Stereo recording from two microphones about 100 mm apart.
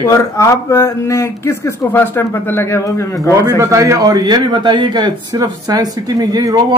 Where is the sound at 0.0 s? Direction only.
30° left (ahead or behind).